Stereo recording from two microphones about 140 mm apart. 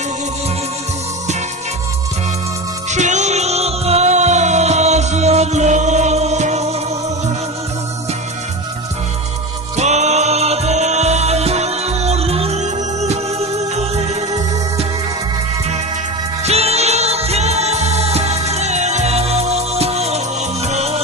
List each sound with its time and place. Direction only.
2.9 s music: 55° right (ahead or behind)
9.7 s music: 55° right (ahead or behind)
16.4 s music: 50° right (ahead or behind)